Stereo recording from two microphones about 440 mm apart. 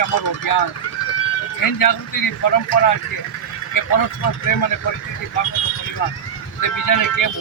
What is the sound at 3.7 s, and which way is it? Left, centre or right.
Speech, left.